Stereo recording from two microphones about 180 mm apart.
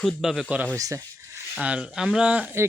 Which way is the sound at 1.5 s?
5° right (ahead or behind).